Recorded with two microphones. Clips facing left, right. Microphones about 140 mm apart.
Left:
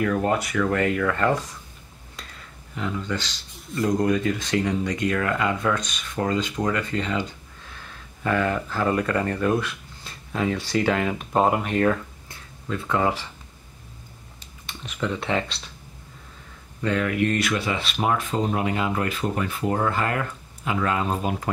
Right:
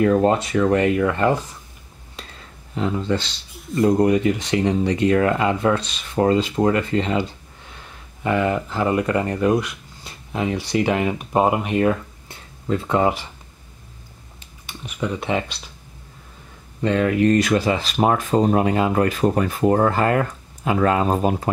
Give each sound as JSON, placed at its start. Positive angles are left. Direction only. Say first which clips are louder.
{"t": 0.0, "sound": "speech", "louder": "right 6 dB", "side_deg": -30}
{"t": 2.7, "sound": "speech", "louder": "right 6 dB", "side_deg": -30}
{"t": 12.3, "sound": "speech", "louder": "right 8 dB", "side_deg": -25}
{"t": 14.7, "sound": "speech", "louder": "right 2 dB", "side_deg": -10}
{"t": 16.8, "sound": "speech", "louder": "right 5 dB", "side_deg": -30}